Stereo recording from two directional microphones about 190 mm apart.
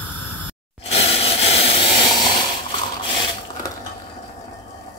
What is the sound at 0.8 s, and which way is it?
Hiss, 30° left (ahead or behind).